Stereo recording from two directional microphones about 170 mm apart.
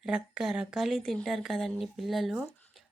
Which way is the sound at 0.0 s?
5° right (ahead or behind).